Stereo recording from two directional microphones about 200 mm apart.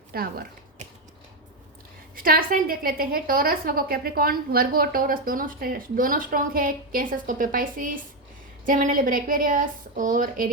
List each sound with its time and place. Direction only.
0.1 s a woman's voice: 50° right (ahead or behind)
2.1 s a woman's voice: 45° right (ahead or behind)